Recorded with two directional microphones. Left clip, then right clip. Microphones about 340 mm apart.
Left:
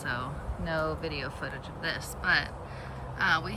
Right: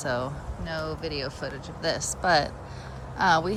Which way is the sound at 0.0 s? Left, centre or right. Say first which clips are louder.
Right 5 dB; centre.